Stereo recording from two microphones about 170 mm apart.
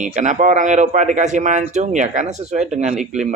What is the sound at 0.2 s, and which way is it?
Speech, 45° right (ahead or behind).